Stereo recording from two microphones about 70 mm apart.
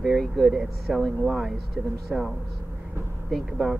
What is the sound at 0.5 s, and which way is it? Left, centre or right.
Speech, centre.